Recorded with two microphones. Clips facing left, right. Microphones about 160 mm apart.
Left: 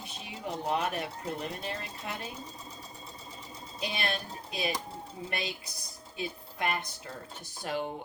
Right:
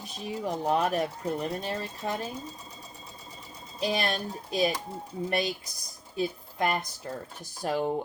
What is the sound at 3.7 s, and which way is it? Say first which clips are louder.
Speech: right 6 dB; 35° right (ahead or behind).